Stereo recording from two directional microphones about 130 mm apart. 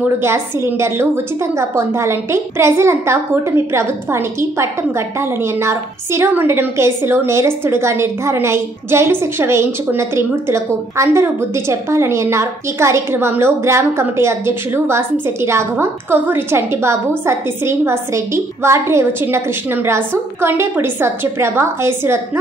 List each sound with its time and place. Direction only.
0.0 s a woman's voice: 20° right (ahead or behind)